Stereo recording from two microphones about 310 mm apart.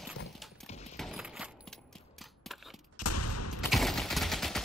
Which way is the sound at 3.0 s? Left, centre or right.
Left.